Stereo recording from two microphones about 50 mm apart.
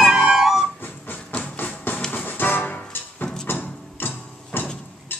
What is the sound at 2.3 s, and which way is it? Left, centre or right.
Music, left.